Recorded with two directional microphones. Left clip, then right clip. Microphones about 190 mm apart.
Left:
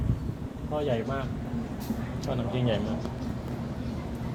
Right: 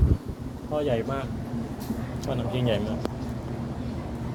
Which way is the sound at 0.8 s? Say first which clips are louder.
Right 2 dB; 10° right (ahead or behind).